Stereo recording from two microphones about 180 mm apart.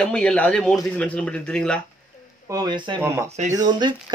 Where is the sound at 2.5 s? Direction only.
25° right (ahead or behind).